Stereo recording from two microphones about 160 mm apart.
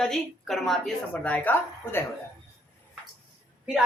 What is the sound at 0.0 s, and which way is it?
A woman's voice, centre (ahead or behind).